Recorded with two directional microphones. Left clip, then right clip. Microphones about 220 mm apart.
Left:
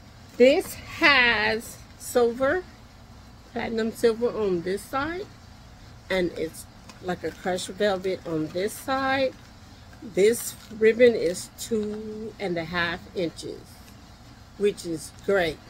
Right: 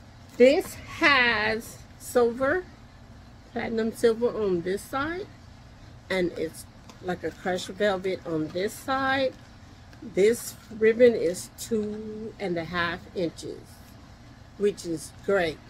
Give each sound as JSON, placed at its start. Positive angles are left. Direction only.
{"t": 0.4, "sound": "speech", "side_deg": 5}
{"t": 14.6, "sound": "speech", "side_deg": 5}